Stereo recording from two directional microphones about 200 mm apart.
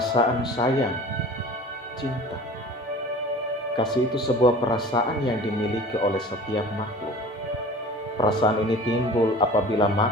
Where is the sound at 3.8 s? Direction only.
20° left (ahead or behind).